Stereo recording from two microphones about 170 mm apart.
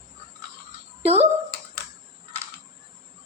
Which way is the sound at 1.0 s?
35° right (ahead or behind).